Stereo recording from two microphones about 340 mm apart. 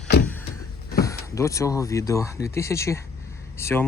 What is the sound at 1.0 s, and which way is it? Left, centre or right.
Speech, centre.